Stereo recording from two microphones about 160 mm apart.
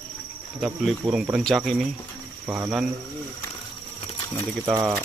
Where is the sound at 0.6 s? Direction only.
Centre (ahead or behind).